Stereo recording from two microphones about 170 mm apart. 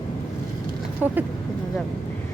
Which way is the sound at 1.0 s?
10° right (ahead or behind).